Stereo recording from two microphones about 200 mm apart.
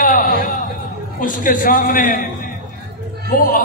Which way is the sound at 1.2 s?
40° left (ahead or behind).